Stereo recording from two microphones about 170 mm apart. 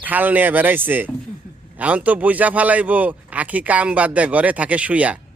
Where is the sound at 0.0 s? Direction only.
10° right (ahead or behind).